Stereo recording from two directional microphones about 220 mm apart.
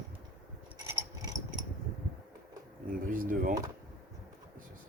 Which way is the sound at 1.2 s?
15° right (ahead or behind).